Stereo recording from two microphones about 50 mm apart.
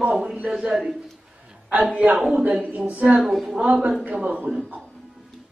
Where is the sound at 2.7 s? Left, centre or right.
Right.